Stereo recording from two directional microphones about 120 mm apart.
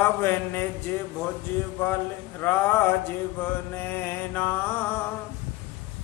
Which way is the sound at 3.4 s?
15° left (ahead or behind).